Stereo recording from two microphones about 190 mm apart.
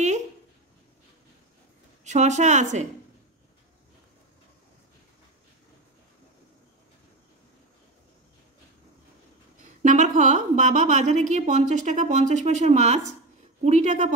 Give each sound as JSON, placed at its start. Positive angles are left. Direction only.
{"t": 2.0, "sound": "a woman's voice", "side_deg": -40}
{"t": 9.8, "sound": "a woman's voice", "side_deg": -40}